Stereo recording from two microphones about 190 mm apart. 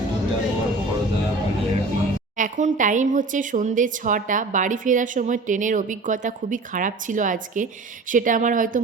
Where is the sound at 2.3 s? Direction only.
40° right (ahead or behind).